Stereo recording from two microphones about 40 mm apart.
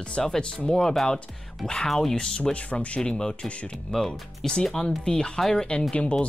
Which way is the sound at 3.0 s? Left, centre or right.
Centre.